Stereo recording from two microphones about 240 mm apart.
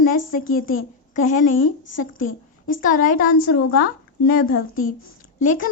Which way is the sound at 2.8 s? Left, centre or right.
Left.